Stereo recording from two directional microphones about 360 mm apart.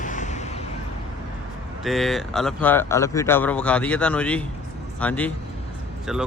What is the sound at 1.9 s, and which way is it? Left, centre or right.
Speech, centre.